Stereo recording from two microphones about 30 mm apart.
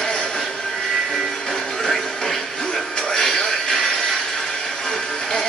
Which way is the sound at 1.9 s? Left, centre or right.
Centre.